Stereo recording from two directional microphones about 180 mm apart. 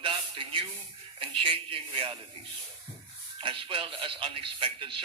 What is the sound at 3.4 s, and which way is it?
Speech, 30° right (ahead or behind).